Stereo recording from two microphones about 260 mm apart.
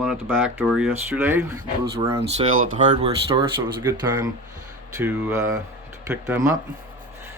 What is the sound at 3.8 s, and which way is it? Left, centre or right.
Speech, centre.